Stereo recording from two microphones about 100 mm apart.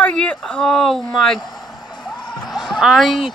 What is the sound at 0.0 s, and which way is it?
Speech, 10° left (ahead or behind).